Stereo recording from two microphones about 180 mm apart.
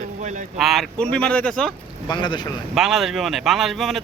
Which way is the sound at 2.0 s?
25° left (ahead or behind).